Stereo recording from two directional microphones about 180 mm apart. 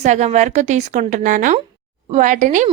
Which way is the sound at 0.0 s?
40° right (ahead or behind).